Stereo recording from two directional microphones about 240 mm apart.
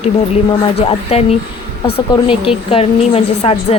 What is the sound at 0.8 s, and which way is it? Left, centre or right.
A woman's voice, left.